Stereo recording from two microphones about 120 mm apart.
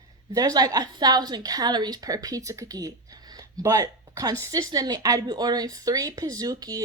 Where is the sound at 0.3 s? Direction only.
30° right (ahead or behind).